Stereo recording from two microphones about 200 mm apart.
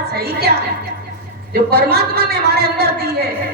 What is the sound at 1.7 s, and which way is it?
A man's voice, 50° right (ahead or behind).